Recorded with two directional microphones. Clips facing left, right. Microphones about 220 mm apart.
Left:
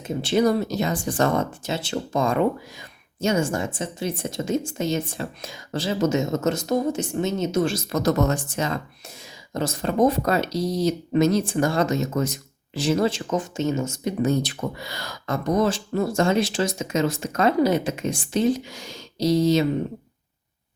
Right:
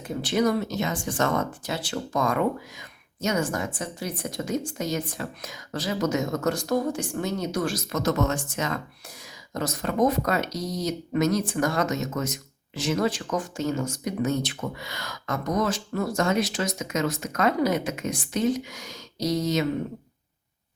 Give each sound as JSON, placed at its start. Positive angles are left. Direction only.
{"t": 0.0, "sound": "speech", "side_deg": 25}